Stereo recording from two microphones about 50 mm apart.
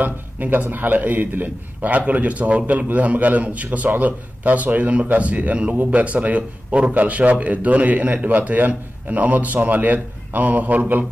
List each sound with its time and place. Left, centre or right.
0.0 s a man's voice: right